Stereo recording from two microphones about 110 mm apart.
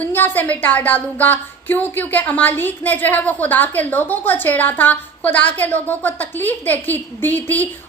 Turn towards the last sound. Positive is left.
turn(degrees=15)  # may be behind; listen again after turning